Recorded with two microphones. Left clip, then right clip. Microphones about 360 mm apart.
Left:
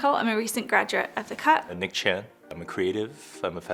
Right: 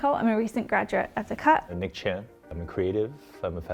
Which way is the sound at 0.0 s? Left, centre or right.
Right.